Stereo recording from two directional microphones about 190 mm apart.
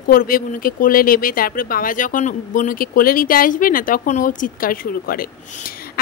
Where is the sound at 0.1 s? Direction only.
50° left (ahead or behind).